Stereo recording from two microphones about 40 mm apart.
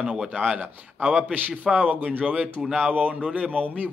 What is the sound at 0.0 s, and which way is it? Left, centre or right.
Speech, centre.